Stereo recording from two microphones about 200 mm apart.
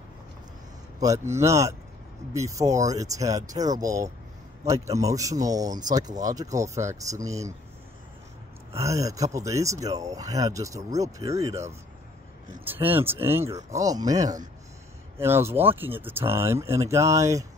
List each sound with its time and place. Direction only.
0.9 s speech: 15° right (ahead or behind)
8.7 s speech: 15° right (ahead or behind)